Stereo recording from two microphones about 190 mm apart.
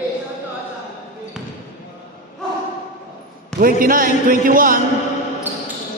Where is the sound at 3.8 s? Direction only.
45° right (ahead or behind).